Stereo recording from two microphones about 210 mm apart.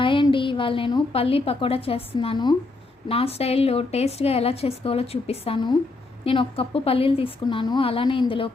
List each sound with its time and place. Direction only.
0.0 s a woman's voice: 25° left (ahead or behind)